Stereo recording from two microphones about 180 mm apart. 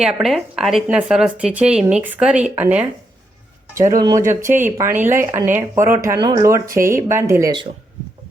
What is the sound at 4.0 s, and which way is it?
Speech, 20° right (ahead or behind).